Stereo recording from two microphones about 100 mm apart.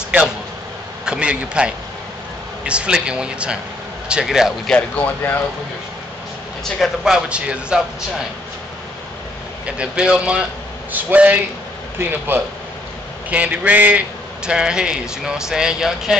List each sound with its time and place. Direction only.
0.1 s a man's voice: 10° right (ahead or behind)
4.6 s speech: 15° left (ahead or behind)
6.8 s speech: 10° right (ahead or behind)
9.7 s a man's voice: 10° right (ahead or behind)